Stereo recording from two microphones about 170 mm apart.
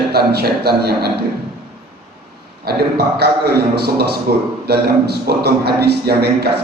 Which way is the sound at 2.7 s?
70° right (ahead or behind).